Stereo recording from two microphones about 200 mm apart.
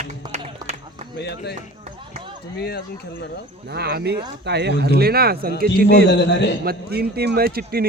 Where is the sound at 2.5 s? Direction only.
55° left (ahead or behind).